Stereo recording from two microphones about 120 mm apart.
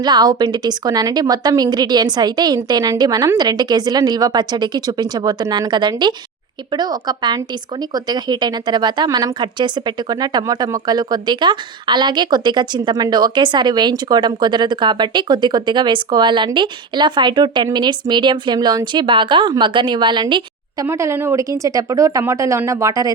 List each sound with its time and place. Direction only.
0.0 s speech: 35° right (ahead or behind)
20.8 s speech: 25° right (ahead or behind)